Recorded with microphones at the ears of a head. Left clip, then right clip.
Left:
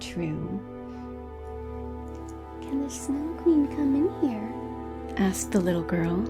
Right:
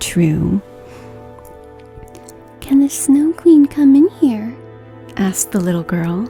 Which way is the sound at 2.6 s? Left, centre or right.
Right.